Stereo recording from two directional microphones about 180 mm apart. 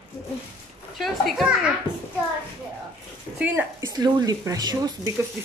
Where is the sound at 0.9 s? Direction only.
Centre (ahead or behind).